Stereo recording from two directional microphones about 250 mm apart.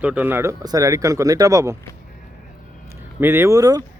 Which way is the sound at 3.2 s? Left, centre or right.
Centre.